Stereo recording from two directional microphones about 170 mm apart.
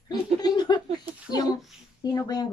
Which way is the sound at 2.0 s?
25° left (ahead or behind).